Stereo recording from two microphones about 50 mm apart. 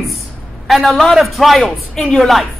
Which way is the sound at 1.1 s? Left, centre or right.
Centre.